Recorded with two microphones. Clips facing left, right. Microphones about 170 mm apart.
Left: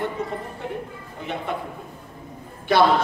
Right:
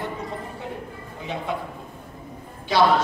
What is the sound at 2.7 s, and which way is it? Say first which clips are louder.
Speech: left 2 dB; 55° left (ahead or behind).